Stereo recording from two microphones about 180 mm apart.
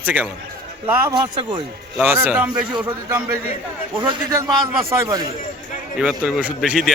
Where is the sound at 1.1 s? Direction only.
25° right (ahead or behind).